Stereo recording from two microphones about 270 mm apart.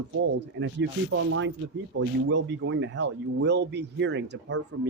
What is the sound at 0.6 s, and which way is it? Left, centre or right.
Speech, right.